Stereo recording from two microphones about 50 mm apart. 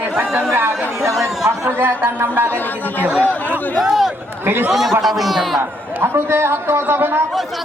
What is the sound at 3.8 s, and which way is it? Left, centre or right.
A man's voice, centre.